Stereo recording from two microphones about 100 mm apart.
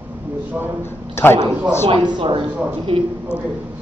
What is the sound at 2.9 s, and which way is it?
Speech, 70° right (ahead or behind).